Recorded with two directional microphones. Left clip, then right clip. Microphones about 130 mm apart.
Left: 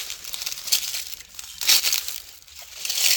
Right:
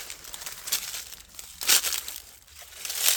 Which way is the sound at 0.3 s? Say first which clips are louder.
Left 8 dB; 15° left (ahead or behind).